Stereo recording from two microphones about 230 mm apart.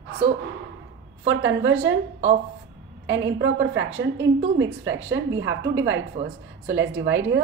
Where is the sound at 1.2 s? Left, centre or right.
Right.